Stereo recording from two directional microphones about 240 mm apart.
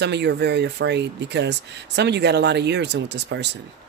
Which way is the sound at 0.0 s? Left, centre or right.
Right.